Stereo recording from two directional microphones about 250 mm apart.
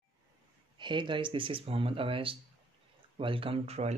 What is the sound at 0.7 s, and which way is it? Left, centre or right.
Speech, centre.